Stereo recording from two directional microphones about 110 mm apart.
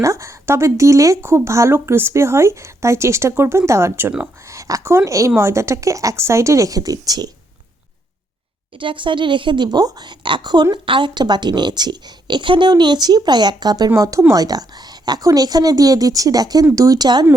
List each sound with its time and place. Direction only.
0.0 s a woman's voice: 25° right (ahead or behind)
8.8 s speech: 50° right (ahead or behind)